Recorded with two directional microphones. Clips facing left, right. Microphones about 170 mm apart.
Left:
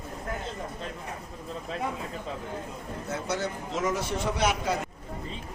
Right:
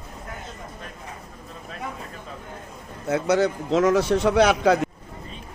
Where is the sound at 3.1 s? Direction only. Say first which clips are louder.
Right 11 dB; 85° right.